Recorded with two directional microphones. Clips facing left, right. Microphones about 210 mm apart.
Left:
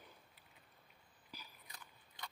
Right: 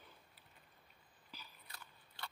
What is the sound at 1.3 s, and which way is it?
Biting, 15° left (ahead or behind).